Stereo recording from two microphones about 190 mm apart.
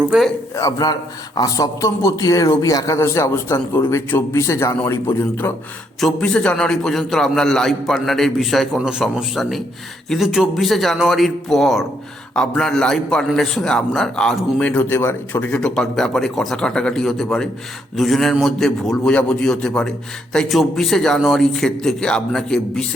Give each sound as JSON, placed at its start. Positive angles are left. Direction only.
{"t": 0.5, "sound": "a man's voice", "side_deg": 20}